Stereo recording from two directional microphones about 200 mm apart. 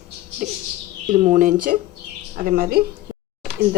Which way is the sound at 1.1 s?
40° right (ahead or behind).